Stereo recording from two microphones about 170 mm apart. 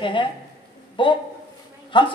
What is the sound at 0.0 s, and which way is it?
A woman's voice, 30° left (ahead or behind).